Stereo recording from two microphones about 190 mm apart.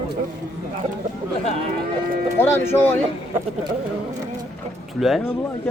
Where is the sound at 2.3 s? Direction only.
10° left (ahead or behind).